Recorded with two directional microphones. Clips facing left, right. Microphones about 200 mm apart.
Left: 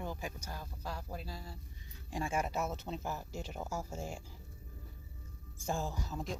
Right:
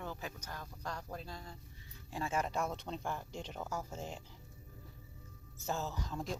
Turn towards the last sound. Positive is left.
turn(degrees=5)  # may be behind; listen again after turning